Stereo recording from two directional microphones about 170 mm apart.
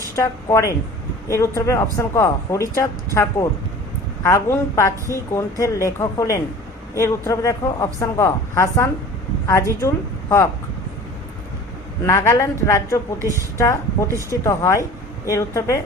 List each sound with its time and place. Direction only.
0.2 s speech: 15° left (ahead or behind)
4.2 s speech: 15° left (ahead or behind)
12.0 s speech: 15° left (ahead or behind)